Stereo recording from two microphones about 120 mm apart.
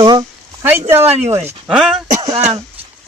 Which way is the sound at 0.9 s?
20° right (ahead or behind).